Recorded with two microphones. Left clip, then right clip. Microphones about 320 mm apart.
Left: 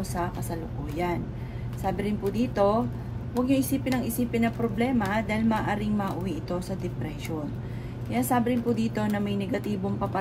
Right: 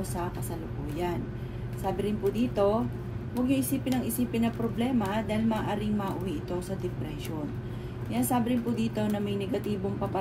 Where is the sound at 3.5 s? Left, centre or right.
Left.